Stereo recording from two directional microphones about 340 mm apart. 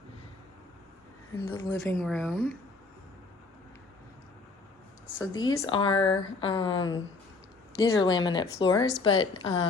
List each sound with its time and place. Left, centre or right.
1.3 s speech: centre
5.0 s a sound: centre
5.3 s speech: left
5.5 s speech: centre